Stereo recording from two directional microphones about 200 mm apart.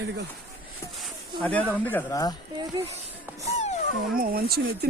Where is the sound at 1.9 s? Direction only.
15° left (ahead or behind).